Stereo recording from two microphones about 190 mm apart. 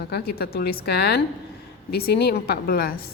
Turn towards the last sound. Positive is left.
turn(degrees=50)  # may be behind; listen again after turning